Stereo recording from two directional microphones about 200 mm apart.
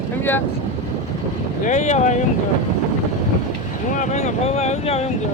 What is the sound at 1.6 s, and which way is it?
Speech, 35° left (ahead or behind).